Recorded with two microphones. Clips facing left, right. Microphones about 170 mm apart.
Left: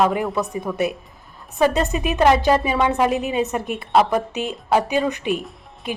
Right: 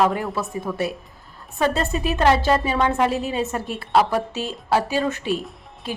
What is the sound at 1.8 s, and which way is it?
A woman's voice, 15° left (ahead or behind).